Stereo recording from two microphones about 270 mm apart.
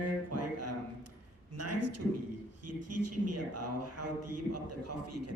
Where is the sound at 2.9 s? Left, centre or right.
Right.